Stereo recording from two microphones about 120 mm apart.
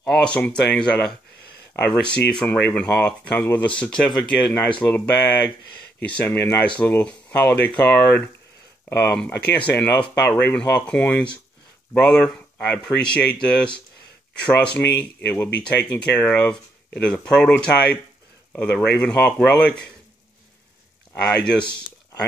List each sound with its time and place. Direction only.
0.0 s speech: 5° left (ahead or behind)
2.1 s speech: 10° left (ahead or behind)
21.1 s speech: 5° left (ahead or behind)